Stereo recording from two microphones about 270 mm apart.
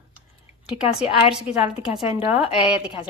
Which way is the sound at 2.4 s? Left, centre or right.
Centre.